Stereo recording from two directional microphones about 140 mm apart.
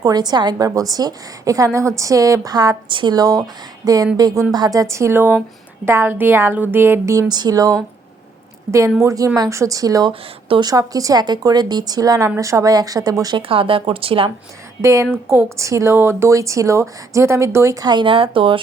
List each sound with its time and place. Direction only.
0.0 s speech: 30° right (ahead or behind)
9.0 s speech: 25° right (ahead or behind)
10.1 s speech: 40° right (ahead or behind)
10.7 s speech: 25° right (ahead or behind)
13.5 s speech: 40° right (ahead or behind)
14.8 s speech: 20° right (ahead or behind); by 18.6 s 40° right (ahead or behind)